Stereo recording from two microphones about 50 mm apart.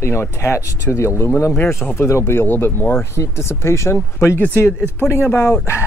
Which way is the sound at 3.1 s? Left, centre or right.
Left.